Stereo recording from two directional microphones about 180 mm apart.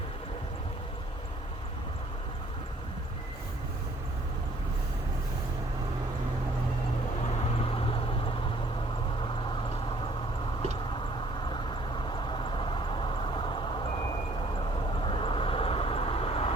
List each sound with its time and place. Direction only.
7.6 s vehicle: 30° left (ahead or behind)
12.0 s vehicle: 25° left (ahead or behind)